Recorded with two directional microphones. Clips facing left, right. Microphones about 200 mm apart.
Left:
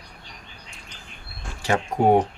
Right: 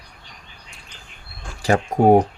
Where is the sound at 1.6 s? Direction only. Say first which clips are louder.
Right 4 dB; 40° right (ahead or behind).